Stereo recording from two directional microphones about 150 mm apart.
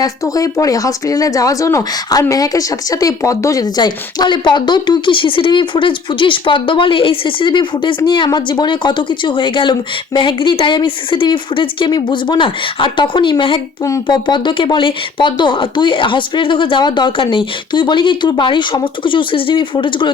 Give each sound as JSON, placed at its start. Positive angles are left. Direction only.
{"t": 0.0, "sound": "speech", "side_deg": 25}